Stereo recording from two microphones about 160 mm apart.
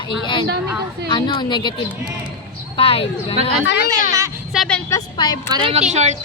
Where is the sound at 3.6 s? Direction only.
65° left (ahead or behind).